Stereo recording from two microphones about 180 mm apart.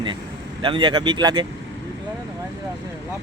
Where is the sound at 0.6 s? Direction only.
25° right (ahead or behind).